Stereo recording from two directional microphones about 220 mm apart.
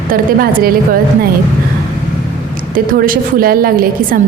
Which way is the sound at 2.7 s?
40° right (ahead or behind).